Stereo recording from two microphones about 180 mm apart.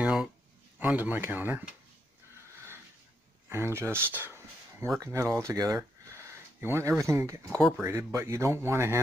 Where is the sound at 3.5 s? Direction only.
15° right (ahead or behind).